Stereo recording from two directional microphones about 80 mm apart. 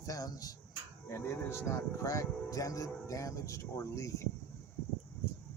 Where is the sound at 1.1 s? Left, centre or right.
Left.